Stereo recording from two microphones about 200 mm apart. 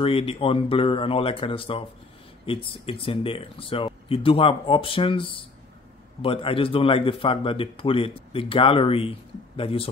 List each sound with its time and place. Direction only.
0.0 s speech: 25° left (ahead or behind)